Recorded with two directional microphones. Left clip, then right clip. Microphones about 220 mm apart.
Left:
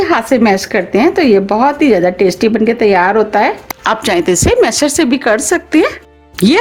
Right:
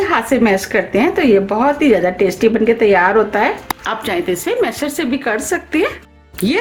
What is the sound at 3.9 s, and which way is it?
A woman's voice, 45° left (ahead or behind).